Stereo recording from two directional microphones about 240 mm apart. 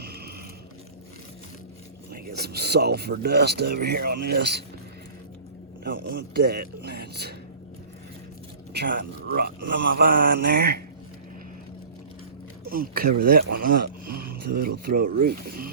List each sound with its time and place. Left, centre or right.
0.0 s a sound: right
2.1 s speech: right
5.8 s speech: right
8.7 s speech: right
12.6 s speech: right